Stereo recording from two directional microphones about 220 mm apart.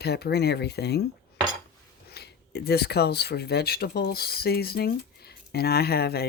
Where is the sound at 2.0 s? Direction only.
45° left (ahead or behind).